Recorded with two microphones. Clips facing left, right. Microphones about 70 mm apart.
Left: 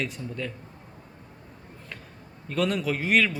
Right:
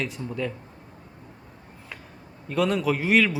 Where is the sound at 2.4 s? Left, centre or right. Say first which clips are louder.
Right 3 dB; centre.